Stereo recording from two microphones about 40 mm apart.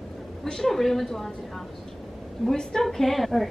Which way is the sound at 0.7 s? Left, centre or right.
Centre.